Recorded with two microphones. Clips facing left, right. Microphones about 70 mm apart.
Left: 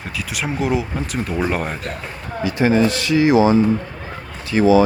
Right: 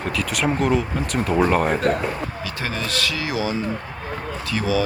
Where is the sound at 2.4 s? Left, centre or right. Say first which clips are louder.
Left 17 dB; centre.